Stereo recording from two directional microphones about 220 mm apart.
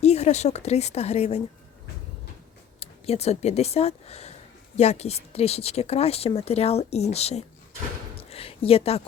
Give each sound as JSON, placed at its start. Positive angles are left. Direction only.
{"t": 0.0, "sound": "speech", "side_deg": 30}
{"t": 2.8, "sound": "a woman's voice", "side_deg": 30}
{"t": 8.2, "sound": "a sound", "side_deg": 25}